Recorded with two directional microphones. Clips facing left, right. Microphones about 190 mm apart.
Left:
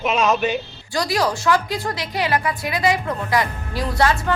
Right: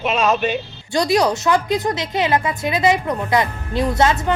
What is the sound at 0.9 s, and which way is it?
A woman's voice, 20° right (ahead or behind).